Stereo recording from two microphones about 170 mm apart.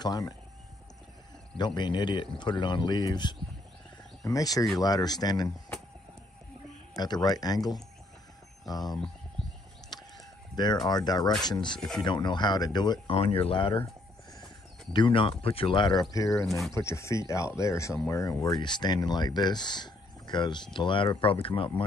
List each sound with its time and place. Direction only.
0.0 s speech: 25° left (ahead or behind)
1.6 s speech: 25° left (ahead or behind)
7.0 s speech: 25° left (ahead or behind)
9.8 s a sound: 25° left (ahead or behind)
11.4 s speech: 25° left (ahead or behind)
16.4 s speech: centre (ahead or behind)
16.7 s speech: 15° left (ahead or behind)